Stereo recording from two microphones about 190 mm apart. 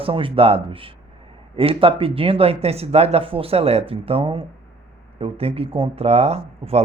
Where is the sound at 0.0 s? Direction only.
25° right (ahead or behind).